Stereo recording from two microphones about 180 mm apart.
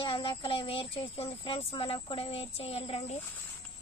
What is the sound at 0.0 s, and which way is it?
Speech, 30° left (ahead or behind).